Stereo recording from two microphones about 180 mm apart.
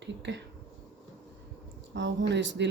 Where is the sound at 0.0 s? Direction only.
75° right (ahead or behind).